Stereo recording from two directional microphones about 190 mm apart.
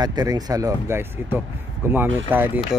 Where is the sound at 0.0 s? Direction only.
20° right (ahead or behind).